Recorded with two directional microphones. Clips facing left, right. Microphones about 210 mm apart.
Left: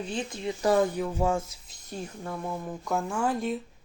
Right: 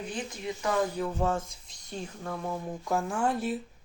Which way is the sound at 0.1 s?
30° left (ahead or behind).